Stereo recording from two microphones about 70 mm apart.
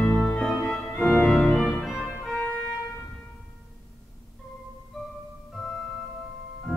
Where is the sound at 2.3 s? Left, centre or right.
Left.